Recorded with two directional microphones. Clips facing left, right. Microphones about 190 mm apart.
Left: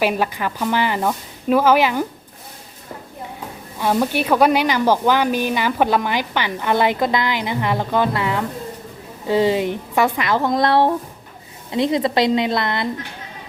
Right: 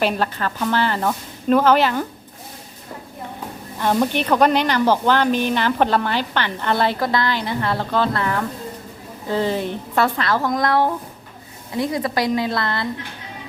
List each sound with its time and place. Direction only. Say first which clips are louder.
0.0 s speech: left 1 dB; 10° left (ahead or behind)
3.8 s speech: even; 10° left (ahead or behind)
10.5 s a woman's voice: left 5 dB; 30° left (ahead or behind)